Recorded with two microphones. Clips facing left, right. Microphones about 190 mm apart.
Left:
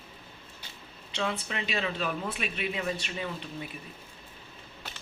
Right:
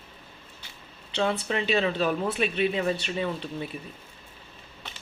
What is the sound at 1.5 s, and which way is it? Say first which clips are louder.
Speech: right 7 dB; 35° right (ahead or behind).